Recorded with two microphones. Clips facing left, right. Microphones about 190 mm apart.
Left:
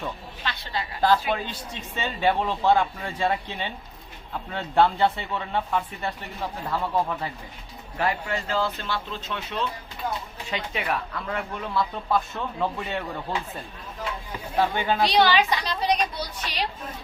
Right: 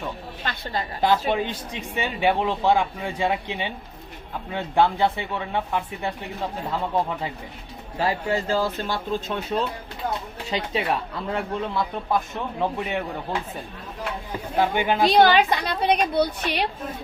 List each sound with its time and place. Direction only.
0.4 s a sound: 45° right (ahead or behind)
1.3 s speech: 15° right (ahead or behind)
8.4 s speech: 45° right (ahead or behind); by 13.1 s 15° right (ahead or behind)
14.6 s speech: 15° right (ahead or behind)
15.0 s a woman's voice: 50° right (ahead or behind)